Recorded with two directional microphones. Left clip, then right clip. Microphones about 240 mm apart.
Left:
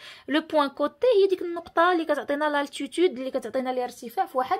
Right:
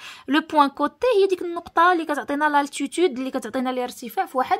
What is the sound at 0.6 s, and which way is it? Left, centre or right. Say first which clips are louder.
A woman's voice: right 5 dB; right.